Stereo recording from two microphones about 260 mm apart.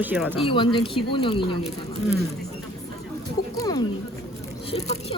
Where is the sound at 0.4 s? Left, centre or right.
Centre.